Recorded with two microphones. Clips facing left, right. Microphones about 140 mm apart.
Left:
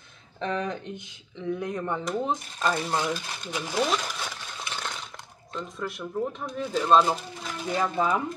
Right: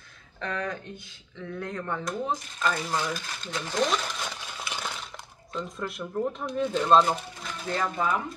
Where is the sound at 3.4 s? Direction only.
10° left (ahead or behind).